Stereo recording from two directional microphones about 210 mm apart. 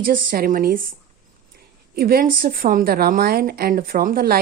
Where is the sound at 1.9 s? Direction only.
45° right (ahead or behind).